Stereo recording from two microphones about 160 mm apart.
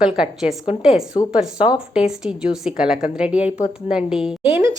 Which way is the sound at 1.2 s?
35° left (ahead or behind).